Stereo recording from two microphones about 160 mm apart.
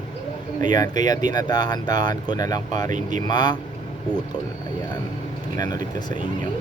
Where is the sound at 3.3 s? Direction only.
25° left (ahead or behind).